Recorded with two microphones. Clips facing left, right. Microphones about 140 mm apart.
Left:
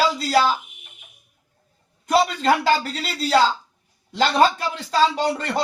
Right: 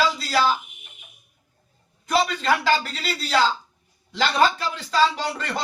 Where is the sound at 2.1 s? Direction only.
45° left (ahead or behind).